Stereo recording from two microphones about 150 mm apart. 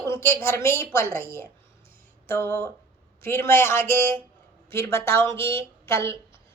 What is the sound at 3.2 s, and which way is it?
A woman's voice, 15° left (ahead or behind).